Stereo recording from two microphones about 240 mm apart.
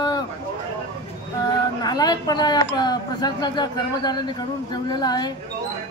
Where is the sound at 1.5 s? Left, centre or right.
Centre.